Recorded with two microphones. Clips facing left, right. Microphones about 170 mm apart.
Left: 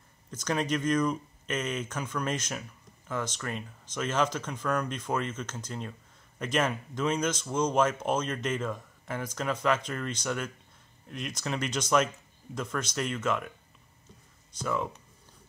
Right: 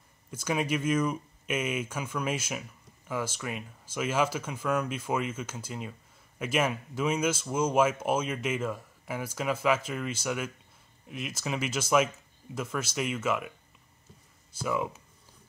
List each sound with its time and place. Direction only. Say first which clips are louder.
0.3 s speech: even; 10° right (ahead or behind)
14.5 s speech: right 1 dB; 10° right (ahead or behind)